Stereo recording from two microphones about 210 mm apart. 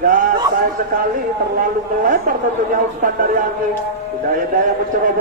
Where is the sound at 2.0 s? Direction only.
40° right (ahead or behind).